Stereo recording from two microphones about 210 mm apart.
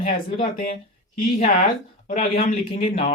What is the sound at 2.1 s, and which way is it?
Speech, 40° left (ahead or behind).